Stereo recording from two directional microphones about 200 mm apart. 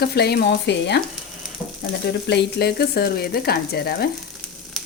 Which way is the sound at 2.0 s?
55° left (ahead or behind).